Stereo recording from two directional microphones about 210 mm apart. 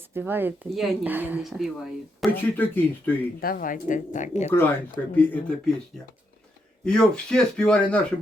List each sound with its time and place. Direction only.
0.1 s a woman's voice: 10° right (ahead or behind)
2.3 s speech: 10° left (ahead or behind)
3.4 s speech: 40° left (ahead or behind)
5.1 s speech: 5° left (ahead or behind)
6.8 s a woman's voice: 5° left (ahead or behind)